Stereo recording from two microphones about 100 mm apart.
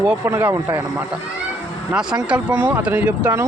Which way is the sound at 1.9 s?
10° right (ahead or behind).